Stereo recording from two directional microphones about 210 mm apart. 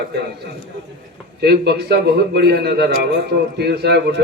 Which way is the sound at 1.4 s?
50° right (ahead or behind).